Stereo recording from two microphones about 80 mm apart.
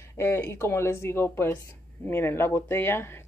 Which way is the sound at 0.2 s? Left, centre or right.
Left.